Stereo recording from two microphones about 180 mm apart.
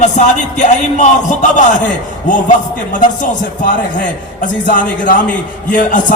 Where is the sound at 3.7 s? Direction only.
45° left (ahead or behind).